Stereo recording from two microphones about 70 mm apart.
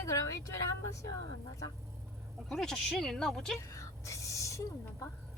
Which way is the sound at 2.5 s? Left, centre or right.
Centre.